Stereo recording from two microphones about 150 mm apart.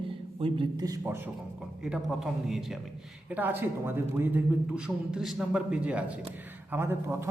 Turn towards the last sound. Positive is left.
turn(degrees=-15)  # may be behind; listen again after turning